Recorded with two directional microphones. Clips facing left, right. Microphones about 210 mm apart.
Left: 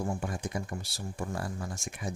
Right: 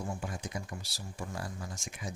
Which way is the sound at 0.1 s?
50° left (ahead or behind).